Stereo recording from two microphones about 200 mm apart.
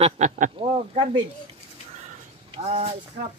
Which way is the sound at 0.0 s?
35° right (ahead or behind).